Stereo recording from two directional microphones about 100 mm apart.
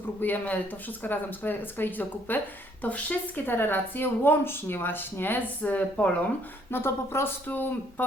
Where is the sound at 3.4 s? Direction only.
20° left (ahead or behind).